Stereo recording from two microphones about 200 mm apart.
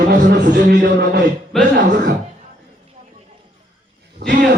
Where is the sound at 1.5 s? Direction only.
Centre (ahead or behind).